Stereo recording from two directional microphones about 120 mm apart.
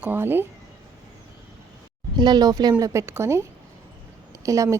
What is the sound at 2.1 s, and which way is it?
Speech, 35° right (ahead or behind).